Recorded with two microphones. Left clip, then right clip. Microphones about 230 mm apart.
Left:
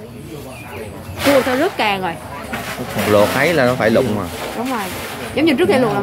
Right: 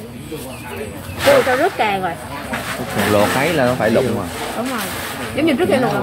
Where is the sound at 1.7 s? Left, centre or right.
Left.